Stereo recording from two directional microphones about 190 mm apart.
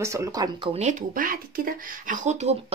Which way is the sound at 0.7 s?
40° right (ahead or behind).